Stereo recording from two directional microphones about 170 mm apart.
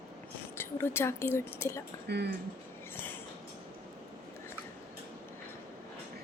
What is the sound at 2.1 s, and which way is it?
Speech, 75° right (ahead or behind).